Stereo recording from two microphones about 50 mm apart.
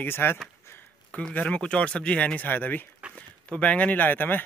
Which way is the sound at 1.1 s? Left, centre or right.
Left.